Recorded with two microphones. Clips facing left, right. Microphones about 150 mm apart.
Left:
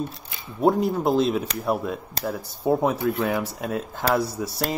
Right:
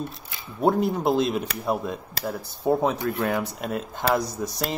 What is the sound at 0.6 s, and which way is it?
Speech, centre (ahead or behind).